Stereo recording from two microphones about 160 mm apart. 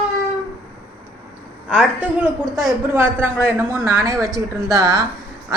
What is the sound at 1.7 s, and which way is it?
A woman's voice, 5° right (ahead or behind).